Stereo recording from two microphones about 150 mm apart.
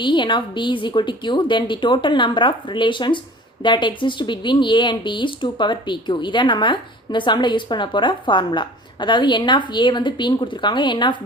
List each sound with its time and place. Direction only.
0.0 s speech: 30° left (ahead or behind)